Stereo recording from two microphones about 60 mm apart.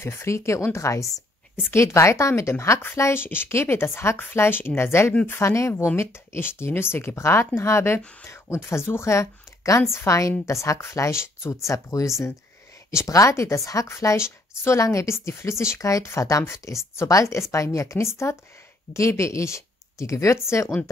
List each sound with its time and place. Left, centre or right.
0.0 s speech: left
2.5 s speech: left
13.8 s speech: left